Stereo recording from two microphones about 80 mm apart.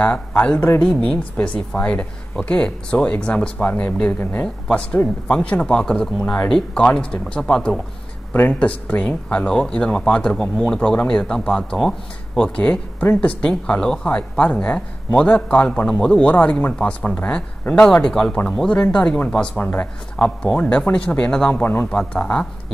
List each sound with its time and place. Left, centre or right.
0.0 s a man's voice: centre
7.5 s speech: centre
8.3 s a man's voice: left
21.6 s a man's voice: left
22.1 s a man's voice: centre